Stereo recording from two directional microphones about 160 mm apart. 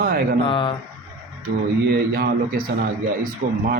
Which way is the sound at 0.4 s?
30° left (ahead or behind).